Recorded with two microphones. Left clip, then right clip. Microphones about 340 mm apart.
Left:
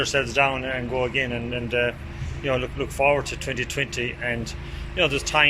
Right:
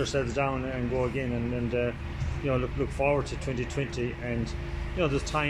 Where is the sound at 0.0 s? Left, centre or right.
Left.